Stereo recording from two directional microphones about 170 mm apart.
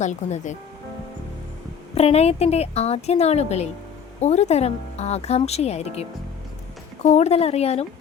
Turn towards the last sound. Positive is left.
turn(degrees=40)  # may be behind; listen again after turning